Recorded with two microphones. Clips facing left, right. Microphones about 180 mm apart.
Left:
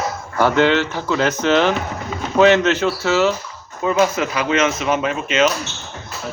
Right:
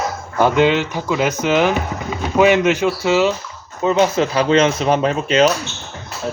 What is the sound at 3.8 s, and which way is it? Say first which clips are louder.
Speech: right 2 dB; 25° right (ahead or behind).